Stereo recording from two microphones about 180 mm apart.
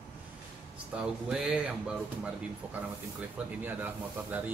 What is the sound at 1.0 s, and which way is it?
Speech, 5° right (ahead or behind).